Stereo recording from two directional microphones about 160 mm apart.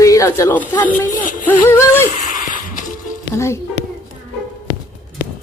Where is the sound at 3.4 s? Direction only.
15° left (ahead or behind).